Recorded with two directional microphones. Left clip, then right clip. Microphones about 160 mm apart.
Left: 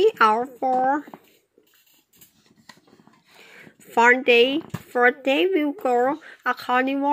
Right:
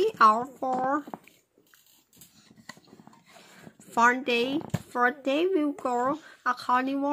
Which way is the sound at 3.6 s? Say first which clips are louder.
Left 6 dB; 5° left (ahead or behind).